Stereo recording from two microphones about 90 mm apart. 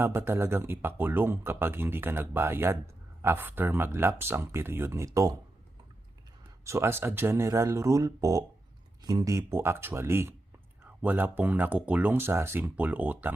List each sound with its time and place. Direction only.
0.0 s speech: 25° right (ahead or behind)
6.7 s speech: 30° right (ahead or behind); by 12.1 s 15° right (ahead or behind)
12.1 s speech: 25° right (ahead or behind)